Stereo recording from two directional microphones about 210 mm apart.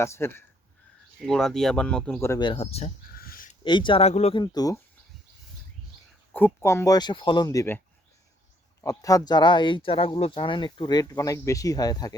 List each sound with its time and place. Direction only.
0.0 s speech: 10° left (ahead or behind)
2.3 s speech: 20° left (ahead or behind)
3.2 s a sound: 45° left (ahead or behind)
3.6 s speech: 20° left (ahead or behind)
6.3 s speech: 10° left (ahead or behind)
8.8 s speech: 15° left (ahead or behind)